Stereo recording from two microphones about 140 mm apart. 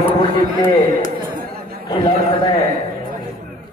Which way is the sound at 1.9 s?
40° left (ahead or behind).